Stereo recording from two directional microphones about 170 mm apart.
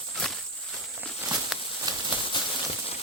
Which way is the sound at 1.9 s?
25° right (ahead or behind).